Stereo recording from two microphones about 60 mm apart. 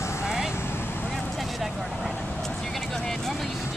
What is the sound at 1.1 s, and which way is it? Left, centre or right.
Vehicle, centre.